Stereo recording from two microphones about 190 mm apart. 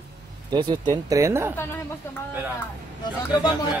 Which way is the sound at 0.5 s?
25° right (ahead or behind).